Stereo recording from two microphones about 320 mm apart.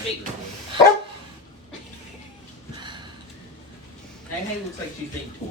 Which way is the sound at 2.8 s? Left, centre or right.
Centre.